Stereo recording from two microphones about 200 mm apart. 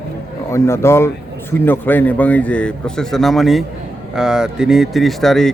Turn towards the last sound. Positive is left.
turn(degrees=0)  # may be behind; listen again after turning